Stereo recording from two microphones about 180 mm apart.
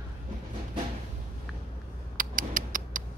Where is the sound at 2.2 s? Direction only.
50° right (ahead or behind).